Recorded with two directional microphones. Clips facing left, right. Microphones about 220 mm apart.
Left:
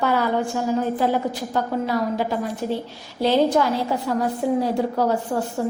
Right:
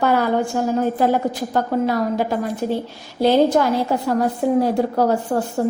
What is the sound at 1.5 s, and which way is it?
A woman's voice, 50° right (ahead or behind).